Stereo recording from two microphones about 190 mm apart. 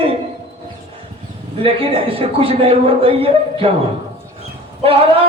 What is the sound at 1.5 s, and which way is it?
A man's voice, 30° right (ahead or behind).